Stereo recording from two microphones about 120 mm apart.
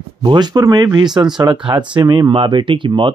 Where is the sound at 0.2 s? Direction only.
40° right (ahead or behind).